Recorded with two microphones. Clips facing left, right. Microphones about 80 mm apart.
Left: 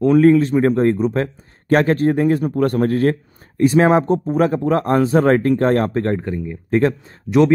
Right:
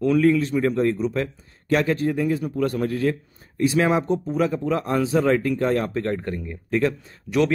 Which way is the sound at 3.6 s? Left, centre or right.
Left.